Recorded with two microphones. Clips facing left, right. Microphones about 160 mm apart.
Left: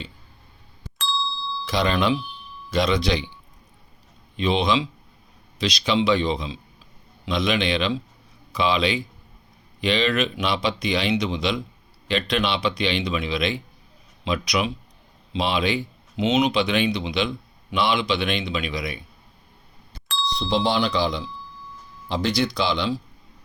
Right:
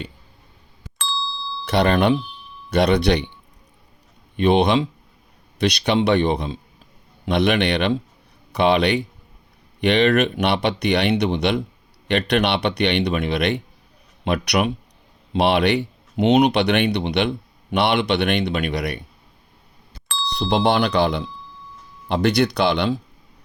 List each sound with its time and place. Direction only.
0.9 s ding: centre (ahead or behind)
1.6 s speech: 65° right (ahead or behind)
4.4 s speech: 60° right (ahead or behind)
20.4 s speech: 60° right (ahead or behind)